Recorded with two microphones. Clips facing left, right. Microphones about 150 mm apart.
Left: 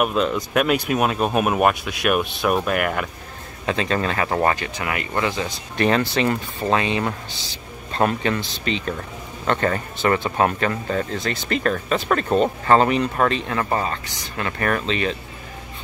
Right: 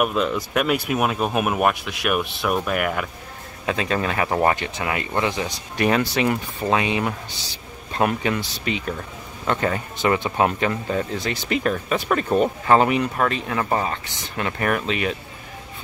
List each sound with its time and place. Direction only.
0.0 s speech: centre (ahead or behind)
2.1 s speech: 15° left (ahead or behind)
2.7 s speech: centre (ahead or behind)